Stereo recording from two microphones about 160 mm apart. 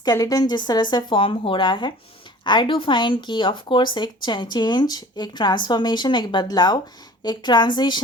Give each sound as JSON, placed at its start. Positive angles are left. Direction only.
{"t": 0.0, "sound": "speech", "side_deg": 25}